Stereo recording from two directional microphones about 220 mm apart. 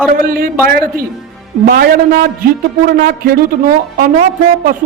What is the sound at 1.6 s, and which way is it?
A man's voice, 45° right (ahead or behind).